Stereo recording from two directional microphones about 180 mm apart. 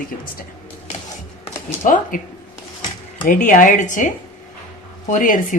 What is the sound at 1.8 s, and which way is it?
Speech, 45° left (ahead or behind).